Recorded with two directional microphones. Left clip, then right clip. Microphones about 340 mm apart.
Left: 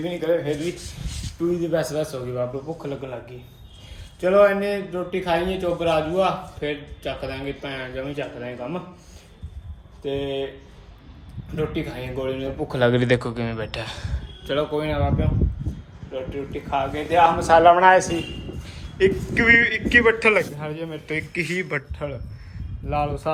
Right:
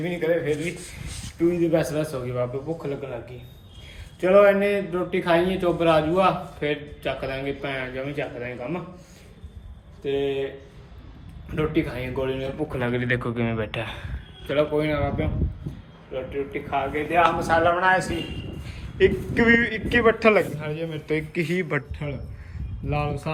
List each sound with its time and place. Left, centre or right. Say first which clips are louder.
0.0 s a man's voice: left 1 dB; centre
4.2 s a man's voice: even; centre
10.0 s a man's voice: right 2 dB; centre
11.5 s a man's voice: right 2 dB; centre
12.4 s a man's voice: left 6 dB; left; by 17.2 s centre
17.5 s a man's voice: left 10 dB; left
18.6 s a man's voice: even; centre